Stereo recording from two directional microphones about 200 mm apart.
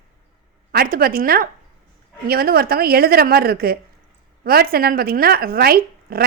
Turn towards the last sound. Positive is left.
turn(degrees=-50)  # may be behind; listen again after turning